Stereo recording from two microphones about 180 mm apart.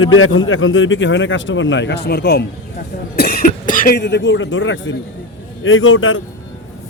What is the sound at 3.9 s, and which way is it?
Speech, 75° left (ahead or behind).